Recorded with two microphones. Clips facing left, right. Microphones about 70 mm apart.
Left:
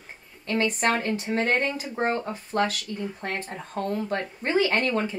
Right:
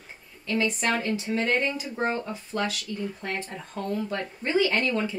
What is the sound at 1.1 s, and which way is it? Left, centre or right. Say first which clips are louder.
Speech: left 1 dB; left.